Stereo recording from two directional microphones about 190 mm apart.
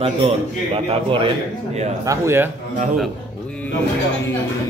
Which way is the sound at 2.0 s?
15° right (ahead or behind).